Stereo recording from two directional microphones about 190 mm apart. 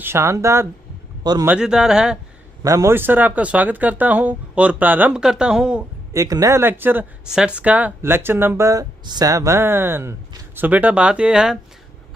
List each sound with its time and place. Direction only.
0.0 s speech: 15° right (ahead or behind)
1.5 s speech: 5° right (ahead or behind)
2.6 s speech: 15° right (ahead or behind)
6.1 s speech: 15° right (ahead or behind)